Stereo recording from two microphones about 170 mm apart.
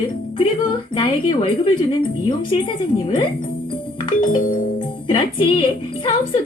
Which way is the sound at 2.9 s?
25° left (ahead or behind).